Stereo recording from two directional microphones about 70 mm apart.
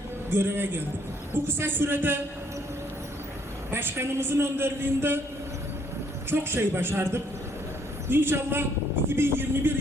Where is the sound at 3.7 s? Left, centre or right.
Right.